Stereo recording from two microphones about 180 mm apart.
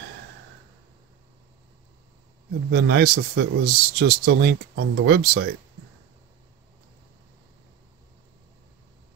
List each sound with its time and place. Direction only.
2.7 s speech: 60° right (ahead or behind)